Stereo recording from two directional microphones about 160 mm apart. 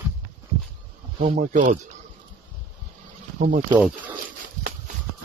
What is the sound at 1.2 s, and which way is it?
Speech, 50° right (ahead or behind).